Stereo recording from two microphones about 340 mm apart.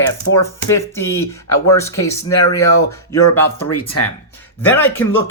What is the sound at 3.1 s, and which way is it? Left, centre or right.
Speech, left.